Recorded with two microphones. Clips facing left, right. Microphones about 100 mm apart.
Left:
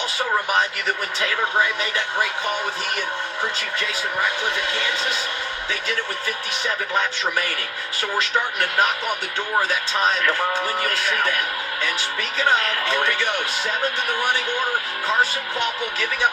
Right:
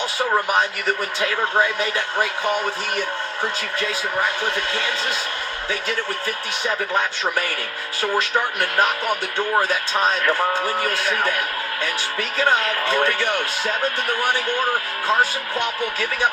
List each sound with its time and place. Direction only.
0.5 s a man's voice: 15° right (ahead or behind)
6.2 s a man's voice: 15° right (ahead or behind)
12.4 s a man's voice: 15° right (ahead or behind)